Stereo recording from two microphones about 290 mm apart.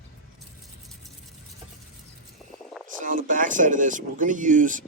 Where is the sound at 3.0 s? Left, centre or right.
Right.